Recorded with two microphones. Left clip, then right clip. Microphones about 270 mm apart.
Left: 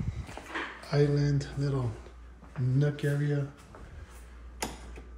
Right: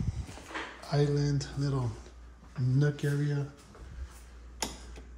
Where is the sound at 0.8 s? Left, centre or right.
Centre.